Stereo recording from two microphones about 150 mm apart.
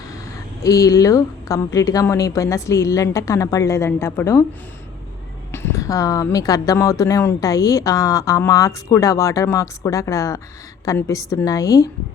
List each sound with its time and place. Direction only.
0.6 s speech: 20° left (ahead or behind)
5.5 s speech: 20° left (ahead or behind)